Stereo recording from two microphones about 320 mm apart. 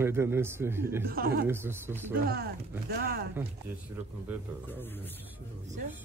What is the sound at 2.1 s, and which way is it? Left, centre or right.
Speech, right.